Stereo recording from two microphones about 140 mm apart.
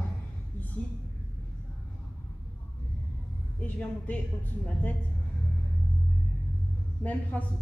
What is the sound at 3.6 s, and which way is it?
A woman's voice, 10° left (ahead or behind).